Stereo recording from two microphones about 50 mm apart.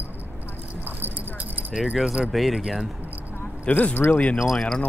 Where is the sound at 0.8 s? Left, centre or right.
Right.